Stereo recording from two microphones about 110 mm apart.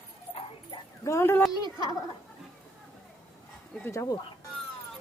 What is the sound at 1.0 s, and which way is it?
Speech, 25° left (ahead or behind).